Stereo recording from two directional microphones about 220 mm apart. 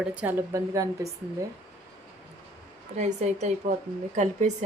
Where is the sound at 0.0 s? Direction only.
5° right (ahead or behind).